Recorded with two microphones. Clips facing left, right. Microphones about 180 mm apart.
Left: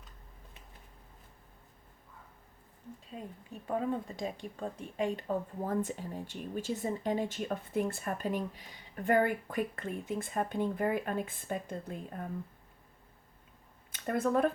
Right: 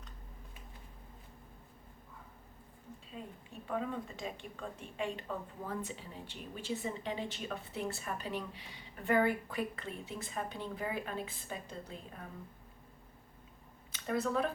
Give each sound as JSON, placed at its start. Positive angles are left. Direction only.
{"t": 3.7, "sound": "speech", "side_deg": 40}
{"t": 13.9, "sound": "speech", "side_deg": 50}